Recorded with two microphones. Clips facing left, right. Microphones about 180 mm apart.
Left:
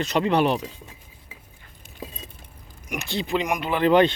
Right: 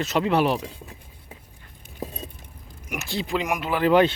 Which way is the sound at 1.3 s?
55° right (ahead or behind).